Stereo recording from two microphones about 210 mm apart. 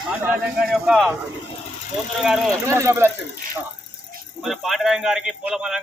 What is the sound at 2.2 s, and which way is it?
Speech, centre (ahead or behind).